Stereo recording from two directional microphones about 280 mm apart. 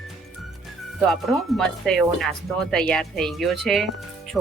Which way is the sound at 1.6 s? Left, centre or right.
Centre.